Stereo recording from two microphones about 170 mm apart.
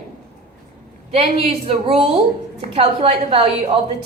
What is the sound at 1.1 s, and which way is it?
A woman's voice, 35° right (ahead or behind).